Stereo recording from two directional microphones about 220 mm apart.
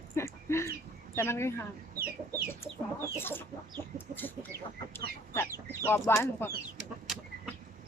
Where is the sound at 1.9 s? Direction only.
45° right (ahead or behind).